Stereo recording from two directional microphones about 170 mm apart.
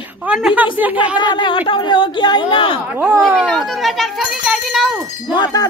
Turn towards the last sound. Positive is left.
turn(degrees=25)  # may be behind; listen again after turning